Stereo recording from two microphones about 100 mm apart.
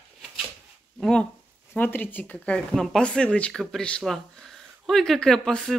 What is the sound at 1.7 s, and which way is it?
Speech, 20° left (ahead or behind).